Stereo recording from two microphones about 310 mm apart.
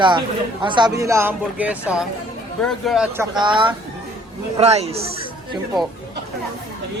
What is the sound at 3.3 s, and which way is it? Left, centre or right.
Speech, centre.